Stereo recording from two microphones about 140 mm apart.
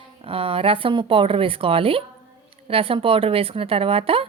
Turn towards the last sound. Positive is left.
turn(degrees=-40)  # may be behind; listen again after turning